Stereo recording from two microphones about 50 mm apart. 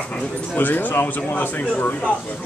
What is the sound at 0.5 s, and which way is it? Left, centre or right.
Speech, left.